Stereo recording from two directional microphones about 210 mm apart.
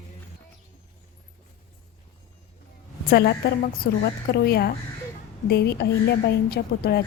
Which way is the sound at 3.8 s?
45° left (ahead or behind).